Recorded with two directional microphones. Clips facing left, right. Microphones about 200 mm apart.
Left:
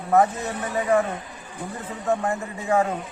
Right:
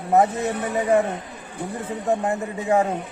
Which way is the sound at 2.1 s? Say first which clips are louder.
Right 1 dB; 20° right (ahead or behind).